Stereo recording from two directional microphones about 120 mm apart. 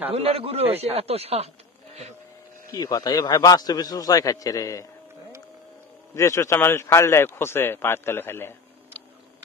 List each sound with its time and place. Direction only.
0.1 s speech: 55° right (ahead or behind)
2.7 s a man's voice: 30° left (ahead or behind)
6.1 s a man's voice: 25° left (ahead or behind)